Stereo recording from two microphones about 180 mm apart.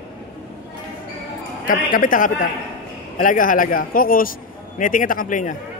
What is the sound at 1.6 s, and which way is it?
A man's voice, 50° left (ahead or behind).